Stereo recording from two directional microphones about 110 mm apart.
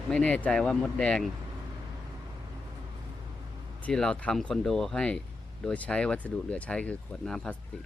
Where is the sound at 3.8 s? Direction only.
10° left (ahead or behind).